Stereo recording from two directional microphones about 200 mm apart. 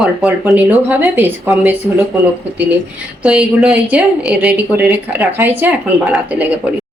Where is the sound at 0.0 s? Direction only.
Centre (ahead or behind).